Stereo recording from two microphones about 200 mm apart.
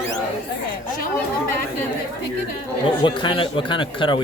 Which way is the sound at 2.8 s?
25° left (ahead or behind).